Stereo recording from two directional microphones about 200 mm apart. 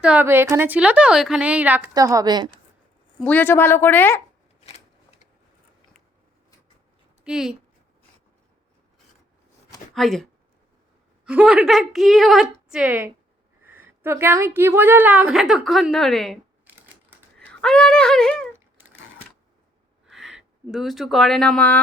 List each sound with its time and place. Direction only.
0.0 s a woman's voice: 5° right (ahead or behind)
3.2 s a woman's voice: 10° left (ahead or behind)
7.3 s a woman's voice: centre (ahead or behind)
9.9 s a woman's voice: centre (ahead or behind)
11.3 s a woman's voice: 5° right (ahead or behind)
17.5 s speech: 5° left (ahead or behind)
20.1 s speech: centre (ahead or behind)